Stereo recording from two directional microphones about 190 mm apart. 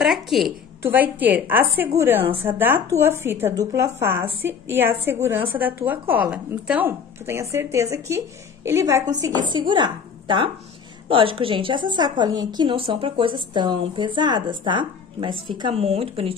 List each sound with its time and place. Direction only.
0.0 s a woman's voice: centre (ahead or behind); by 16.3 s 30° right (ahead or behind)